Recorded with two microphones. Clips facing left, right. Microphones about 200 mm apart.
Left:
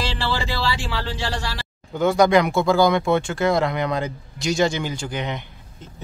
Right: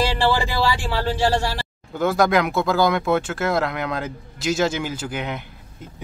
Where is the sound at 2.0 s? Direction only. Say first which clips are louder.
Left 2 dB; centre (ahead or behind).